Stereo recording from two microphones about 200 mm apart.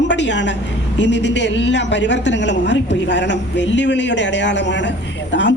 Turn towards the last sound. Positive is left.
turn(degrees=60)  # may be behind; listen again after turning